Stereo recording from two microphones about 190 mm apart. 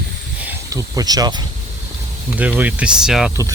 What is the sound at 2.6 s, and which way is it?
Speech, 5° right (ahead or behind).